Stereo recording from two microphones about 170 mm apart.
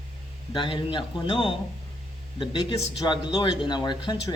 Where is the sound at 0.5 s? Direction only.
30° left (ahead or behind).